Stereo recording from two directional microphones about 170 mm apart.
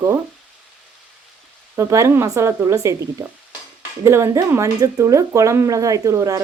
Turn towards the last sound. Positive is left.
turn(degrees=-20)  # may be behind; listen again after turning